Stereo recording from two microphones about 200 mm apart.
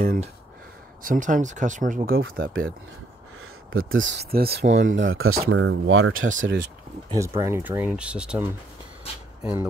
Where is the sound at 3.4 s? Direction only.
90° right; by 4.8 s 60° right (ahead or behind).